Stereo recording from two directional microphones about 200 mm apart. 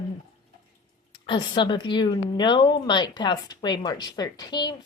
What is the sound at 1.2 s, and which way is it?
Speech, 25° left (ahead or behind).